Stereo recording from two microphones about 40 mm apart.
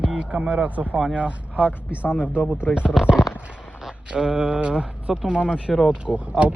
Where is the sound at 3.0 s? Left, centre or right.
Centre.